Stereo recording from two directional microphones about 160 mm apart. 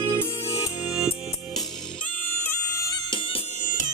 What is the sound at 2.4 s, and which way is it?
Bagpipes, 20° left (ahead or behind).